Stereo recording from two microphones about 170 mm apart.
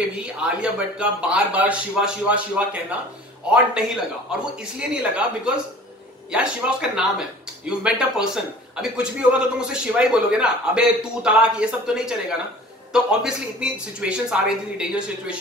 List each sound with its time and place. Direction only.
0.4 s a man's voice: 5° right (ahead or behind)